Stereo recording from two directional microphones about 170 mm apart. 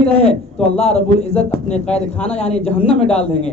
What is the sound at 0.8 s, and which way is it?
A man's voice, 40° left (ahead or behind).